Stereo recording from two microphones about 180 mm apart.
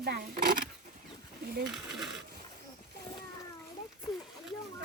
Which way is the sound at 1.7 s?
Centre (ahead or behind).